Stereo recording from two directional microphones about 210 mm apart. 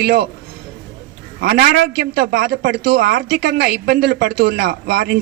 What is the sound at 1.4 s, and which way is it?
A man's voice, 45° right (ahead or behind).